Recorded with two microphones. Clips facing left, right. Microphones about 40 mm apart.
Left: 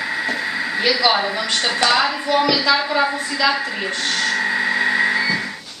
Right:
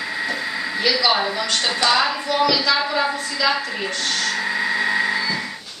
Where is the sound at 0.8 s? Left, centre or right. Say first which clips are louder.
Left 1 dB; centre.